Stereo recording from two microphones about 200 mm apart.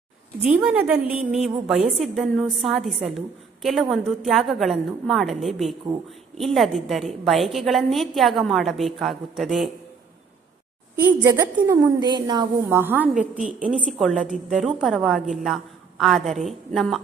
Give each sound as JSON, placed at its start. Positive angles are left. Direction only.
{"t": 0.4, "sound": "a woman's voice", "side_deg": -5}
{"t": 11.3, "sound": "a woman's voice", "side_deg": -20}
{"t": 12.6, "sound": "a woman's voice", "side_deg": -10}